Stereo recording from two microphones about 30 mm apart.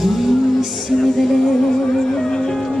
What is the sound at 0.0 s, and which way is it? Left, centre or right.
Music, centre.